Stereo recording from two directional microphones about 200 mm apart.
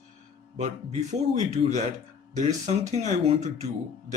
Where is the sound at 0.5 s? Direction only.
35° right (ahead or behind).